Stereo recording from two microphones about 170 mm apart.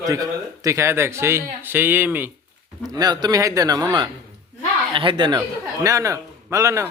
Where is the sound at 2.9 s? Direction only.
25° right (ahead or behind).